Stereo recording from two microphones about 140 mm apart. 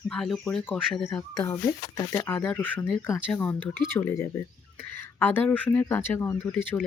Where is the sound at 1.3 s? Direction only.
25° left (ahead or behind).